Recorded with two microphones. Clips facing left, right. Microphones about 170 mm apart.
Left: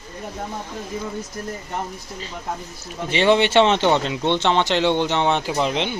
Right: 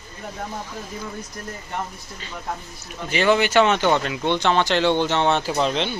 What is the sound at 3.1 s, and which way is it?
Speech, 30° left (ahead or behind).